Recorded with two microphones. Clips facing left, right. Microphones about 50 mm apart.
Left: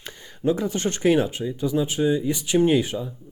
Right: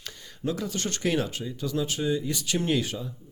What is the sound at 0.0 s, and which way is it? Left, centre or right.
Speech, left.